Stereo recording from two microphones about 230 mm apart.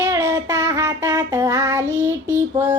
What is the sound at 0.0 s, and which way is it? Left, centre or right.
Child singing, centre.